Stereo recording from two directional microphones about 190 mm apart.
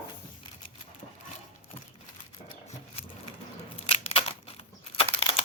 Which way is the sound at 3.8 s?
30° left (ahead or behind).